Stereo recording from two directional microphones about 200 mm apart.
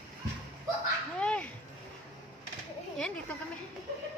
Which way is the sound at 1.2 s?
5° left (ahead or behind).